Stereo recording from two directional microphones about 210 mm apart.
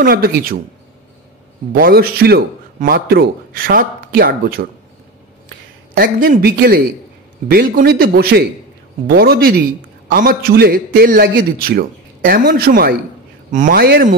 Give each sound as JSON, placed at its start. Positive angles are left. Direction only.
{"t": 0.0, "sound": "a man's voice", "side_deg": -45}
{"t": 1.7, "sound": "a man's voice", "side_deg": -45}
{"t": 5.9, "sound": "a man's voice", "side_deg": -40}